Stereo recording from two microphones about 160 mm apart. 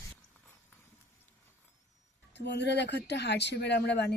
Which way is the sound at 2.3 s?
90° left.